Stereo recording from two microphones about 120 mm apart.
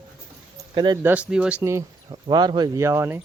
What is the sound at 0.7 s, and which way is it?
Speech, 40° right (ahead or behind).